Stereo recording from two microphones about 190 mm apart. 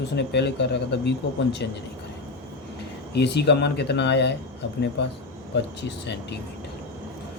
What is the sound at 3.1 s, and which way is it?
Speech, 60° left (ahead or behind).